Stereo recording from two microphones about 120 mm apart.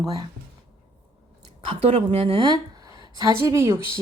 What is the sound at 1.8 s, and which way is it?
A woman's voice, 55° right (ahead or behind).